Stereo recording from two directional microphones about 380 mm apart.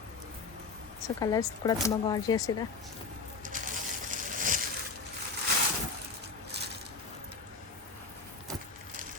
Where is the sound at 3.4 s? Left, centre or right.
Right.